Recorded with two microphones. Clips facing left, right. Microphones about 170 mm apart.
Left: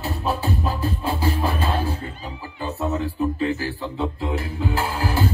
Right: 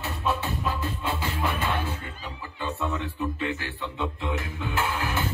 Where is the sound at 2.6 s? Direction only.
35° left (ahead or behind).